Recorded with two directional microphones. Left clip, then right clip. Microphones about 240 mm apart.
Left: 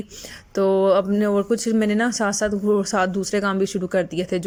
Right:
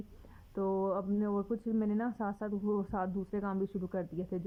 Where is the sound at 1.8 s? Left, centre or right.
Centre.